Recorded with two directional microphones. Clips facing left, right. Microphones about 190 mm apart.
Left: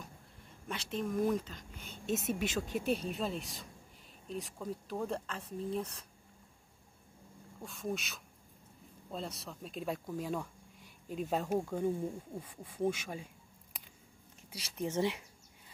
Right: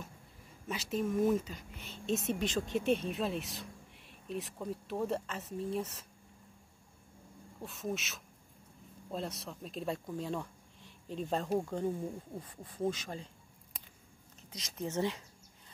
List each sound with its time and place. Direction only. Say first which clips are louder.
0.7 s speech: right 3 dB; 5° right (ahead or behind)
7.6 s speech: even; centre (ahead or behind)
14.8 s speech: left 1 dB; 15° left (ahead or behind)